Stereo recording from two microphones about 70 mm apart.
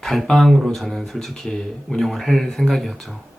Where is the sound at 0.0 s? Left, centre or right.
Centre.